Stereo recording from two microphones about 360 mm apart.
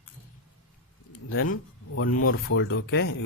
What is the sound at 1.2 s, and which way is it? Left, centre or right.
Speech, left.